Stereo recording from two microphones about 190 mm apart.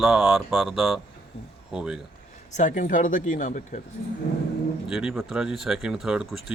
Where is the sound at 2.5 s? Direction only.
40° left (ahead or behind).